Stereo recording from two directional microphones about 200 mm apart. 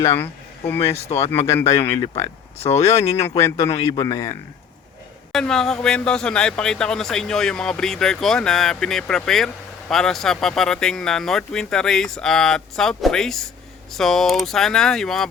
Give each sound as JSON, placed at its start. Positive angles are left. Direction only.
{"t": 0.0, "sound": "a man's voice", "side_deg": 15}
{"t": 1.0, "sound": "speech", "side_deg": 30}
{"t": 1.5, "sound": "a man's voice", "side_deg": 15}
{"t": 5.3, "sound": "speech", "side_deg": 5}